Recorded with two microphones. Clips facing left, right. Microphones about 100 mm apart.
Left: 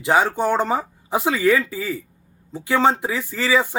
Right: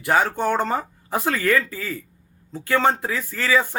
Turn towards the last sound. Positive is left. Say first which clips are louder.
# left 1 dB
turn(degrees=15)  # may be behind; listen again after turning